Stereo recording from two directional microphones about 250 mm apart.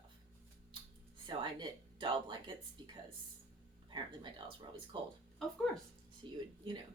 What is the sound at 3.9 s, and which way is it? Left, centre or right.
Speech, centre.